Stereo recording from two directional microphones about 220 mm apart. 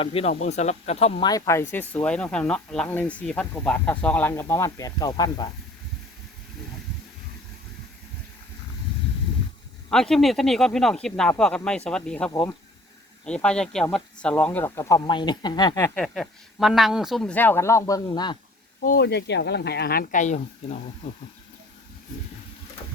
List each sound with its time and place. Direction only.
0.0 s speech: 25° left (ahead or behind)
1.3 s speech: 15° left (ahead or behind)
9.9 s speech: centre (ahead or behind); by 15.9 s 15° left (ahead or behind)
16.0 s speech: centre (ahead or behind); by 18.3 s 20° left (ahead or behind)
18.8 s speech: 45° left (ahead or behind)